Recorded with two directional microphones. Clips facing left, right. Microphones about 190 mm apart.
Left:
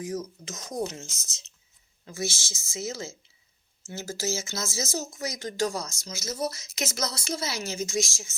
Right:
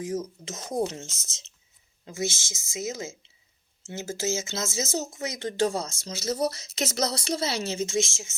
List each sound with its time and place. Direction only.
0.0 s speech: 25° right (ahead or behind)